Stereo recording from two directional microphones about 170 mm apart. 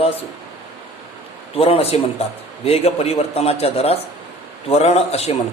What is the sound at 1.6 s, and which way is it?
A man's voice, 35° left (ahead or behind).